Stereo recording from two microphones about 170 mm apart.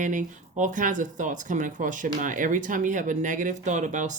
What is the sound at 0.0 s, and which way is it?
Speech, 50° right (ahead or behind).